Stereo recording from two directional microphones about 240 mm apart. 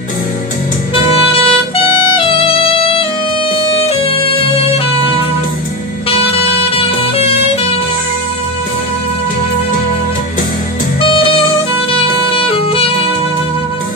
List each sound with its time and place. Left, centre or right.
1.1 s music: left
6.0 s music: left
11.0 s music: left
11.9 s saxophone: left